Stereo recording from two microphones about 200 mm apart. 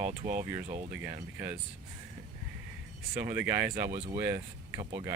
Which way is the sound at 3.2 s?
10° right (ahead or behind).